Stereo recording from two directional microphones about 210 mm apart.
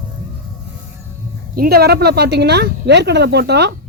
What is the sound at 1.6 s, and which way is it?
Speech, 50° right (ahead or behind).